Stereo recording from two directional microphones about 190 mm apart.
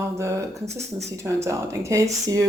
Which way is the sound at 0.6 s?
35° right (ahead or behind).